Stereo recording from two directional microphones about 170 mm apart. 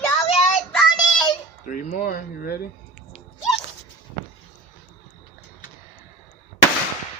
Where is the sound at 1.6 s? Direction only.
55° left (ahead or behind).